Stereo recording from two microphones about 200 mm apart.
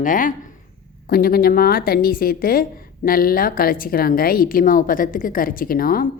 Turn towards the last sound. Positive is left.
turn(degrees=45)  # may be behind; listen again after turning